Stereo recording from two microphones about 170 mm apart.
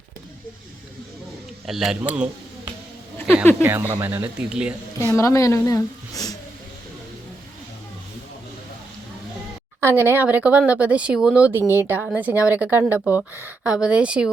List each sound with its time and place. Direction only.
1.6 s a man's voice: centre (ahead or behind)
2.1 s a sound: 5° right (ahead or behind)
3.6 s speech: 10° right (ahead or behind)
5.1 s a woman's voice: 20° left (ahead or behind)
9.8 s speech: 10° right (ahead or behind)